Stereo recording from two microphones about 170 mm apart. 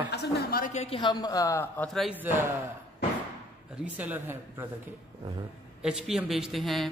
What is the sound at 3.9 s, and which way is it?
Speech, 10° right (ahead or behind).